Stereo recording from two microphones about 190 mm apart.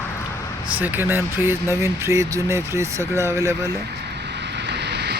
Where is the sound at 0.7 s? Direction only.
10° right (ahead or behind).